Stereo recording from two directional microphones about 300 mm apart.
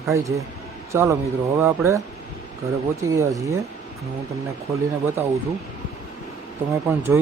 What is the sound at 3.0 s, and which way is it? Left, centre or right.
Speech, centre.